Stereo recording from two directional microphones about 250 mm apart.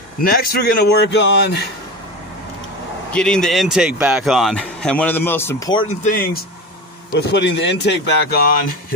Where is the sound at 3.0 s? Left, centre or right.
Centre.